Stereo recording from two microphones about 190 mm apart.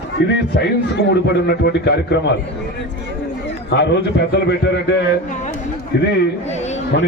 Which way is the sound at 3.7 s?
65° left (ahead or behind).